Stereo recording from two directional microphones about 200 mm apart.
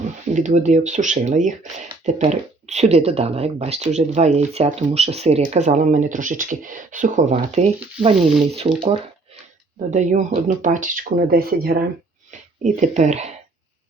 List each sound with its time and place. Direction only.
0.3 s speech: 35° right (ahead or behind)
8.1 s speech: centre (ahead or behind)
8.7 s speech: 30° right (ahead or behind)
9.9 s speech: 35° right (ahead or behind)
12.6 s speech: 35° right (ahead or behind)